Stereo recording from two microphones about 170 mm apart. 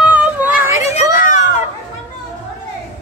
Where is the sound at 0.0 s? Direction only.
5° right (ahead or behind).